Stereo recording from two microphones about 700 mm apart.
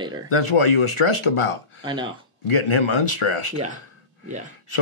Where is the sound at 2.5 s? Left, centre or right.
Left.